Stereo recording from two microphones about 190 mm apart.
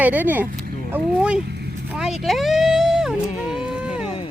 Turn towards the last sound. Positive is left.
turn(degrees=-5)  # may be behind; listen again after turning